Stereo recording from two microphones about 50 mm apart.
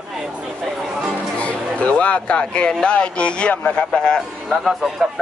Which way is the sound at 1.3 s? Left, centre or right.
Left.